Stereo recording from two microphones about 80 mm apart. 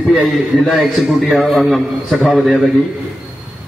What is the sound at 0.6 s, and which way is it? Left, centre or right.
A man's voice, centre.